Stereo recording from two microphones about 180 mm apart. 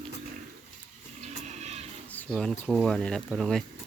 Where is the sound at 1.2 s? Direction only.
40° right (ahead or behind).